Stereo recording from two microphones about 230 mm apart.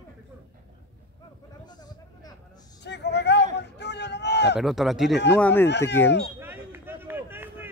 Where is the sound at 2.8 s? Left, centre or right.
Left.